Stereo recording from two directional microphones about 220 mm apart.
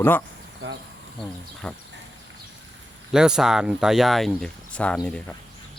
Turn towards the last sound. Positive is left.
turn(degrees=5)  # may be behind; listen again after turning